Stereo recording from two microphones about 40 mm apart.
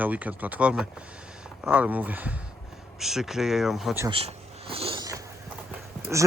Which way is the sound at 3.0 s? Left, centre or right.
Centre.